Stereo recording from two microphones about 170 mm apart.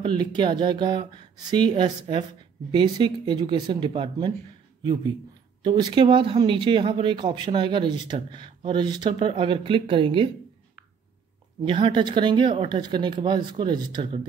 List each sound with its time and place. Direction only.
0.0 s speech: 25° right (ahead or behind)
5.6 s speech: 25° right (ahead or behind)
11.6 s speech: 30° right (ahead or behind)